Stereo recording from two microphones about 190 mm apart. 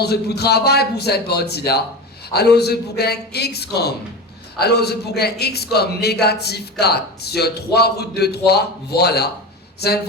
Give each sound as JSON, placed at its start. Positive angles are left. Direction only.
{"t": 0.0, "sound": "a man's voice", "side_deg": 60}